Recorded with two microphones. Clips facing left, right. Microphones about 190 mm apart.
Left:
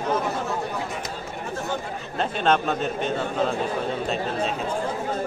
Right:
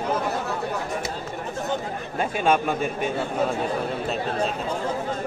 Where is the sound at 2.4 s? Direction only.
10° right (ahead or behind).